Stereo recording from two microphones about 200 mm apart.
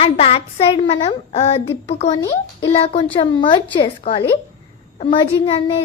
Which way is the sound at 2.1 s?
20° left (ahead or behind).